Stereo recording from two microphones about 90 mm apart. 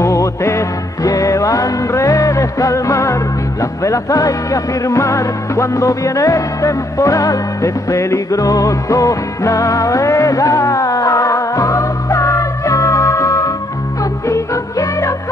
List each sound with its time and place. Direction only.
0.0 s music: 35° left (ahead or behind)